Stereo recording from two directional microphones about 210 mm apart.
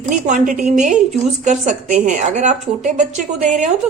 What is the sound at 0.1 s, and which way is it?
A woman's voice, 35° right (ahead or behind).